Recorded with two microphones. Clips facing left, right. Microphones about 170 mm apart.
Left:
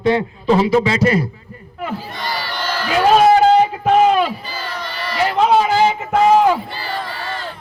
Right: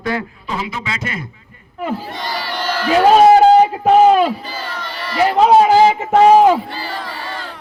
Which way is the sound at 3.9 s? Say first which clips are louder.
Right 3 dB; 35° right (ahead or behind).